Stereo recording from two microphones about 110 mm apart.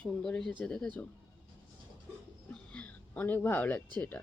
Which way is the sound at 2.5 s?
10° left (ahead or behind).